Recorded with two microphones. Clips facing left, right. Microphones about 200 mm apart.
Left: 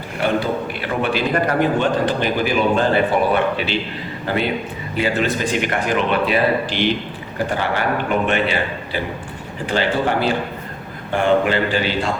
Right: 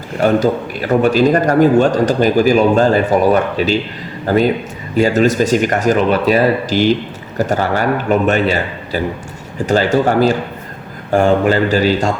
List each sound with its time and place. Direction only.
0.2 s a man's voice: 40° right (ahead or behind)